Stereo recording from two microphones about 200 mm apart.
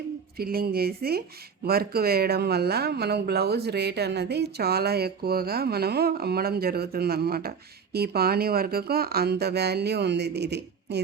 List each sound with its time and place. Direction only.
0.3 s speech: 50° right (ahead or behind)